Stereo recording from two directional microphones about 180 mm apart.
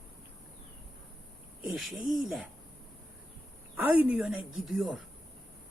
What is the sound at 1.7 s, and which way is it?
Speech, centre (ahead or behind).